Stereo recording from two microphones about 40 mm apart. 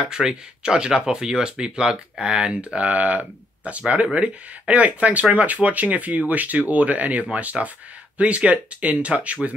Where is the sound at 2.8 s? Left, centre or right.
Right.